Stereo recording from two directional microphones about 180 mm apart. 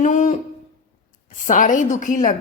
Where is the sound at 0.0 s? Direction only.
45° left (ahead or behind).